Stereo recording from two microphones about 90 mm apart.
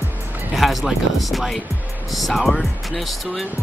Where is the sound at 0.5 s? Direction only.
Centre (ahead or behind).